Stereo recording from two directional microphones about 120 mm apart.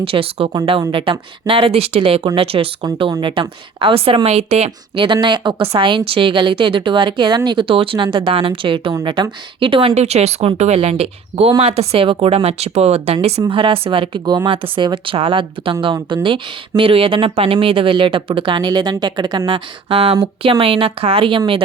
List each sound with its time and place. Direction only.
0.0 s speech: 50° right (ahead or behind)
4.9 s speech: 40° right (ahead or behind)
9.9 s speech: 65° right (ahead or behind)
13.5 s speech: 50° right (ahead or behind)